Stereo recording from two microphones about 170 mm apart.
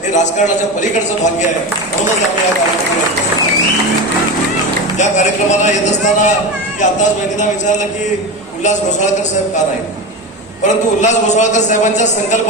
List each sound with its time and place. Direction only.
0.1 s a man's voice: 45° left (ahead or behind)
4.9 s a man's voice: 45° left (ahead or behind)
10.6 s a man's voice: 45° left (ahead or behind)